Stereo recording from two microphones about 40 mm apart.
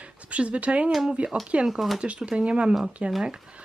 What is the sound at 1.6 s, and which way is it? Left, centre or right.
Speech, centre.